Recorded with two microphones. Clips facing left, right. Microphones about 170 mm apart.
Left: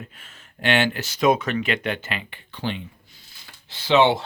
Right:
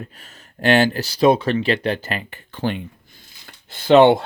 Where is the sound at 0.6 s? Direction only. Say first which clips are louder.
Right 6 dB; 40° right (ahead or behind).